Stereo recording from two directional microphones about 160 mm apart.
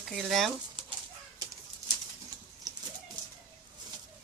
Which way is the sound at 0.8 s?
30° right (ahead or behind).